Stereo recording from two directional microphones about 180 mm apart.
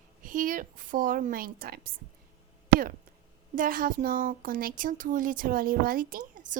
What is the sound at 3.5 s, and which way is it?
A woman's voice, 50° right (ahead or behind).